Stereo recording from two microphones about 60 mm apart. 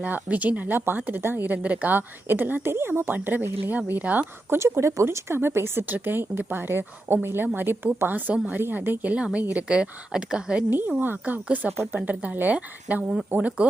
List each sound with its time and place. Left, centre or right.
0.0 s speech: right
3.1 s a woman's voice: right
4.4 s speech: right
9.1 s speech: centre
10.7 s a woman's voice: right